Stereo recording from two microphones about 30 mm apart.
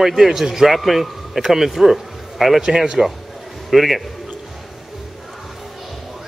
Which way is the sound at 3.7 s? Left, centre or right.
Centre.